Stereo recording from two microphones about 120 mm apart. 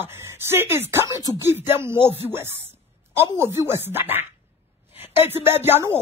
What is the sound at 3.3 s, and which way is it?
Speech, 20° right (ahead or behind).